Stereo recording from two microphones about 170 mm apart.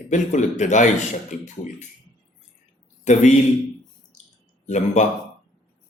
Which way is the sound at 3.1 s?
45° left (ahead or behind).